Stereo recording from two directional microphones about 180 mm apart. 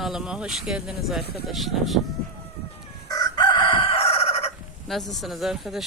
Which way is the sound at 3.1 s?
20° left (ahead or behind).